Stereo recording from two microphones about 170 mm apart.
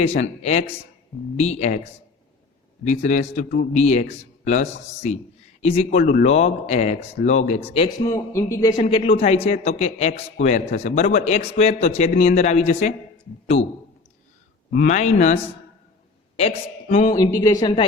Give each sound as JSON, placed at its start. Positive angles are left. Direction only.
{"t": 0.0, "sound": "a man's voice", "side_deg": 40}
{"t": 7.9, "sound": "a man's voice", "side_deg": 20}
{"t": 8.8, "sound": "a man's voice", "side_deg": 35}
{"t": 14.8, "sound": "a man's voice", "side_deg": 45}
{"t": 17.1, "sound": "a woman's voice", "side_deg": 20}